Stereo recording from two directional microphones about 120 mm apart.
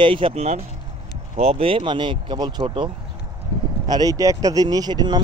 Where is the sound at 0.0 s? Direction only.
45° right (ahead or behind).